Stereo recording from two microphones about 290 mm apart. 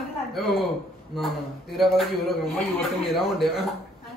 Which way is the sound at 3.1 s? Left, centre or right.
Centre.